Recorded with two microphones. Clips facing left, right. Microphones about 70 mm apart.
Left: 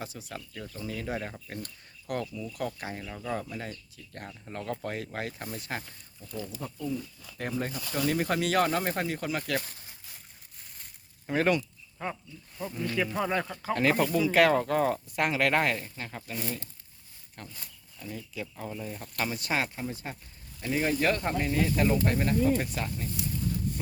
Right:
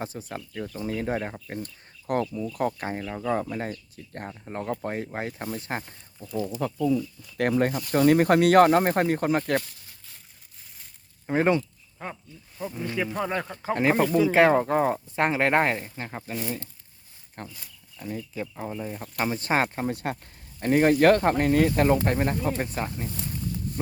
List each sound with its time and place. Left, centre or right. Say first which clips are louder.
0.0 s speech: right 5 dB; right
2.3 s speech: right 7 dB; right
6.4 s speech: right 10 dB; right
7.3 s speech: right 10 dB; right
11.3 s speech: right 4 dB; right
12.5 s speech: right 1 dB; centre
13.5 s speech: right 3 dB; right
16.3 s speech: right 4 dB; centre
17.4 s speech: right 5 dB; right
18.3 s speech: right 2 dB; right
19.2 s speech: right 6 dB; right
19.6 s speech: right 8 dB; right
20.6 s speech: right 9 dB; right